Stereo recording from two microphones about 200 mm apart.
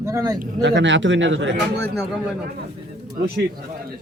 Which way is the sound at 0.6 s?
65° right (ahead or behind).